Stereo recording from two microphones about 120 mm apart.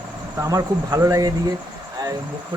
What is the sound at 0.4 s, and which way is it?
Speech, 30° right (ahead or behind).